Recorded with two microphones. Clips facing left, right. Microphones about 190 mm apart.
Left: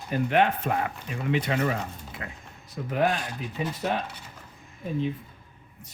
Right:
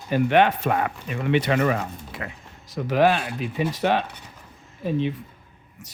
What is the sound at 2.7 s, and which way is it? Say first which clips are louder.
Speech: right 6 dB; 90° right.